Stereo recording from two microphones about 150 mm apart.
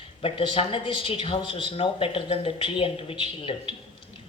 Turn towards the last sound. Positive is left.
turn(degrees=35)  # may be behind; listen again after turning